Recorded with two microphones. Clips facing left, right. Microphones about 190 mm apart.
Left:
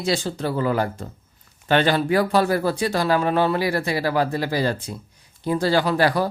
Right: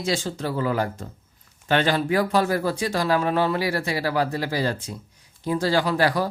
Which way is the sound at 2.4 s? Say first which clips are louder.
Left 2 dB; 35° left (ahead or behind).